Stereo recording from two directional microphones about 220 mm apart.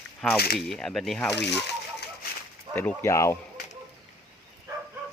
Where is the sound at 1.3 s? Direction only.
50° left (ahead or behind).